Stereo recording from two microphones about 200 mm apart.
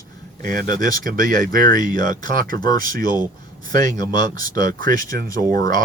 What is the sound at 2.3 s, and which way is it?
Speech, 45° right (ahead or behind).